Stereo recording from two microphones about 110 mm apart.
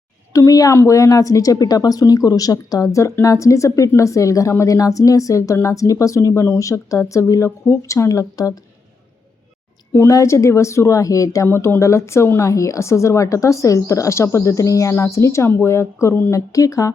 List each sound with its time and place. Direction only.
0.3 s a woman's voice: 35° left (ahead or behind)
9.9 s a woman's voice: 25° left (ahead or behind)